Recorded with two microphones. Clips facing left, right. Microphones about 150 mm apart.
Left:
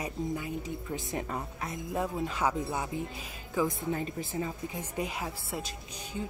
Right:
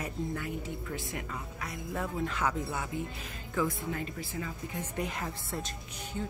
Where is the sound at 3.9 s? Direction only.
25° left (ahead or behind).